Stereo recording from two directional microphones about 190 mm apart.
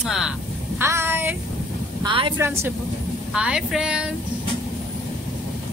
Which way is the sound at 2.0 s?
25° right (ahead or behind).